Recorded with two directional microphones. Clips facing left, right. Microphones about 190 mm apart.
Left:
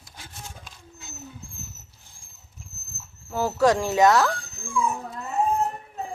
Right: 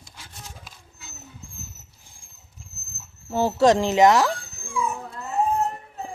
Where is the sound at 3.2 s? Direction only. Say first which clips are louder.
Right 3 dB; 25° right (ahead or behind).